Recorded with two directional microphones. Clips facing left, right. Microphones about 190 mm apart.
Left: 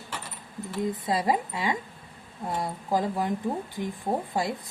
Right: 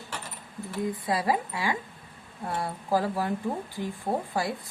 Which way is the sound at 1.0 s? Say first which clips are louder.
Left 1 dB; 25° left (ahead or behind).